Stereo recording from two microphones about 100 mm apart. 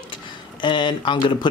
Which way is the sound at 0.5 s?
50° left (ahead or behind).